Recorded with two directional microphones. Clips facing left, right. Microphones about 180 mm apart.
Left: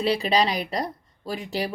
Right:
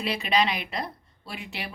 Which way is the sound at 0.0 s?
35° left (ahead or behind).